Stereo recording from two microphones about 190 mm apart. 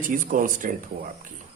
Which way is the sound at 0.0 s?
45° right (ahead or behind).